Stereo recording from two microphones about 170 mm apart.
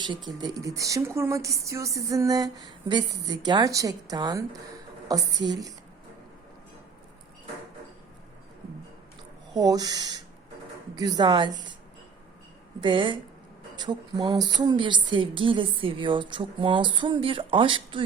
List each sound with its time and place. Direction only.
0.0 s speech: 25° right (ahead or behind)
9.6 s speech: 20° right (ahead or behind)
12.8 s speech: 30° right (ahead or behind)